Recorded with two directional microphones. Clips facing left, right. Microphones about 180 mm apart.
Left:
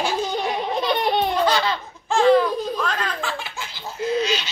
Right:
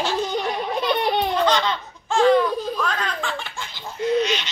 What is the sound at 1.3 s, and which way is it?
Laughter, 10° left (ahead or behind).